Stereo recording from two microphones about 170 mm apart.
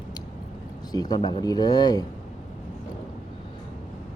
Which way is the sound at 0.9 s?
20° left (ahead or behind).